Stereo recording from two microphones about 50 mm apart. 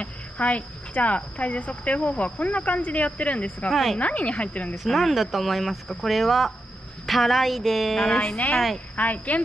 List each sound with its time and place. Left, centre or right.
0.0 s speech: left
3.7 s speech: centre
4.0 s speech: left
4.7 s speech: centre
8.7 s speech: left